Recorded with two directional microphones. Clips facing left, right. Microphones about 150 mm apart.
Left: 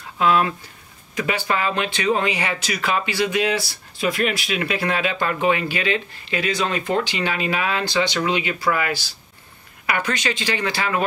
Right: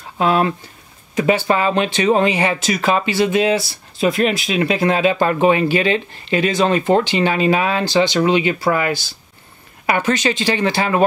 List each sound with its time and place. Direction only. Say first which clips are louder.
0.2 s speech: right 3 dB; 30° right (ahead or behind)